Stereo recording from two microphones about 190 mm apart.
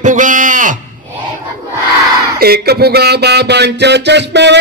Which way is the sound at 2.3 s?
55° right (ahead or behind).